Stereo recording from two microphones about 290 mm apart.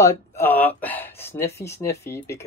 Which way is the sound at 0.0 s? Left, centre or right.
Centre.